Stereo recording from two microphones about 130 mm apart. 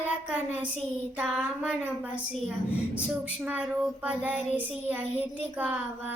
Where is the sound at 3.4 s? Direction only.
10° right (ahead or behind).